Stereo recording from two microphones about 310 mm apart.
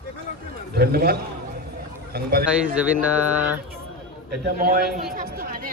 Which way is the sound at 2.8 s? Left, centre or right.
Centre.